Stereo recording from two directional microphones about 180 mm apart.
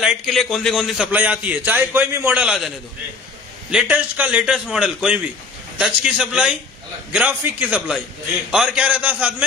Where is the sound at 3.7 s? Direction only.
5° right (ahead or behind).